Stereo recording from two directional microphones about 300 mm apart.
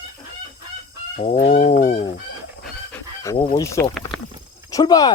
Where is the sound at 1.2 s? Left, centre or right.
Centre.